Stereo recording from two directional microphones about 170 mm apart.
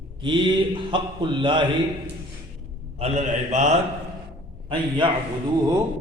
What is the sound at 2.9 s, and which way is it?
Speech, 40° right (ahead or behind).